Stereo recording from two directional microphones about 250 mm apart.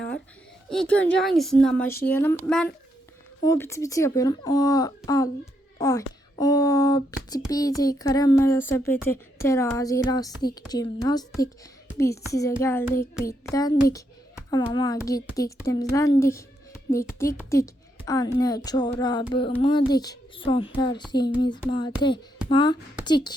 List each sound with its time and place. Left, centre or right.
0.7 s a child's voice: centre